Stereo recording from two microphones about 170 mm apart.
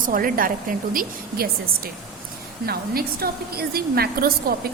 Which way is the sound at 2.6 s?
65° right (ahead or behind).